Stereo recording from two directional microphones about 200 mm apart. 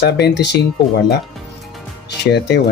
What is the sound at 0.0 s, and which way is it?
Speech, 60° left (ahead or behind).